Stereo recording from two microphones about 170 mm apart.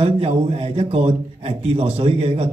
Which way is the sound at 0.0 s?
35° right (ahead or behind).